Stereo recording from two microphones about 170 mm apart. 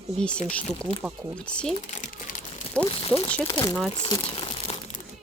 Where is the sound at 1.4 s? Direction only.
5° left (ahead or behind).